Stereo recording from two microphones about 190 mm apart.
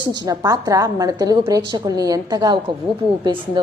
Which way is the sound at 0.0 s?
20° right (ahead or behind).